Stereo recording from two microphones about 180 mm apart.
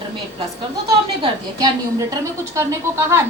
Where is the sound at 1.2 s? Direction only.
20° right (ahead or behind).